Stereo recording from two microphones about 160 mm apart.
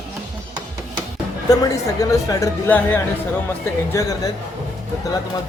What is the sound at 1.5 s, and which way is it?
Speech, 20° left (ahead or behind).